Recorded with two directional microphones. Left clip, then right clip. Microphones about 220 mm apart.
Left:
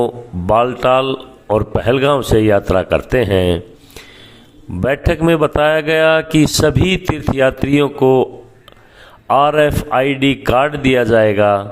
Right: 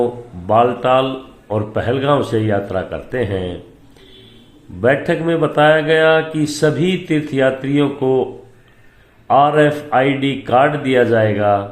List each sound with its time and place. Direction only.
0.0 s speech: 40° left (ahead or behind)
4.8 s speech: 40° left (ahead or behind)